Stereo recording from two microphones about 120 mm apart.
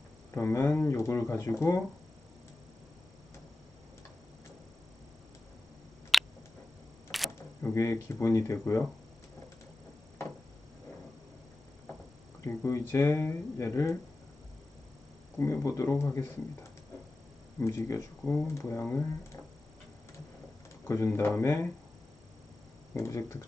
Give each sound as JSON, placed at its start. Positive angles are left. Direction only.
{"t": 0.3, "sound": "speech", "side_deg": 20}
{"t": 6.1, "sound": "finger snapping", "side_deg": 0}
{"t": 7.3, "sound": "a sound", "side_deg": 20}
{"t": 8.0, "sound": "speech", "side_deg": 25}
{"t": 12.5, "sound": "speech", "side_deg": 20}
{"t": 15.4, "sound": "speech", "side_deg": 25}
{"t": 17.6, "sound": "speech", "side_deg": 25}
{"t": 20.8, "sound": "speech", "side_deg": 20}
{"t": 23.0, "sound": "speech", "side_deg": 20}